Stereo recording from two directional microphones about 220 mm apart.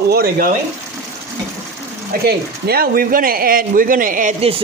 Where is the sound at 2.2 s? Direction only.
45° right (ahead or behind).